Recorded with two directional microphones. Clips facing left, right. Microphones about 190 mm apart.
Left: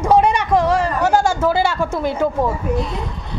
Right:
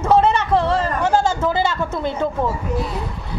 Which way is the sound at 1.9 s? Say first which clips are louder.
Left 3 dB; 25° right (ahead or behind).